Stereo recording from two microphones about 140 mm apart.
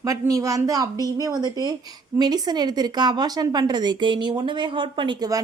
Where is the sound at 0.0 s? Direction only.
25° right (ahead or behind).